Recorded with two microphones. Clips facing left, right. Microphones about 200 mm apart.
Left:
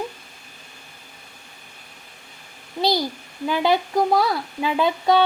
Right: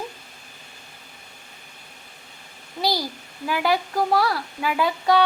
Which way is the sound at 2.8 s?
20° left (ahead or behind).